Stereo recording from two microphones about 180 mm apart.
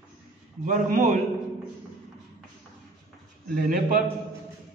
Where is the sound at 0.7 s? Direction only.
45° right (ahead or behind).